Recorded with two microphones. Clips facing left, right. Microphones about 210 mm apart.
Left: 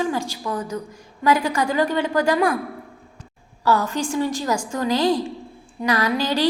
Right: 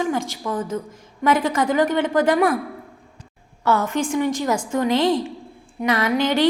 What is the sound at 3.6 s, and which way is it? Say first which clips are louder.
A woman's voice: right 1 dB; 20° right (ahead or behind).